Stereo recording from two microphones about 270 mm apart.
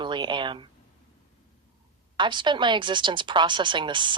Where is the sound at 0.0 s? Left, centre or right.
Centre.